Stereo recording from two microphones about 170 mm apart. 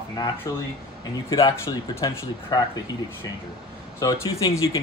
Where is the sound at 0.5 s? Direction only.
20° left (ahead or behind).